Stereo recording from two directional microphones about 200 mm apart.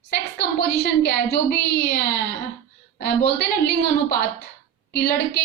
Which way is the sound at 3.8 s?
50° left (ahead or behind).